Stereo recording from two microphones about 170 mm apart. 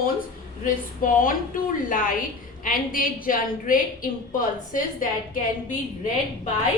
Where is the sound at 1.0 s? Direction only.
55° left (ahead or behind).